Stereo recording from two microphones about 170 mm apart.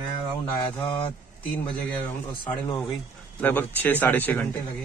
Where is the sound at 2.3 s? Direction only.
25° left (ahead or behind).